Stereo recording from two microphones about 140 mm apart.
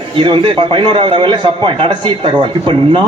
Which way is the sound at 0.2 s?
40° right (ahead or behind).